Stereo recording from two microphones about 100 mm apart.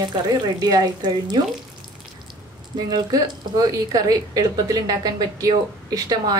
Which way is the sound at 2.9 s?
35° right (ahead or behind).